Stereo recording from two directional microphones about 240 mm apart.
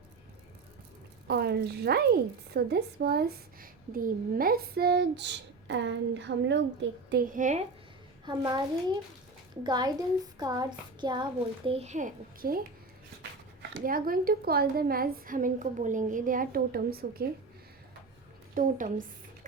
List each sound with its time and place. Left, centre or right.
1.3 s speech: right
7.1 s speech: right
8.2 s a child's voice: centre; by 17.2 s right
18.5 s speech: right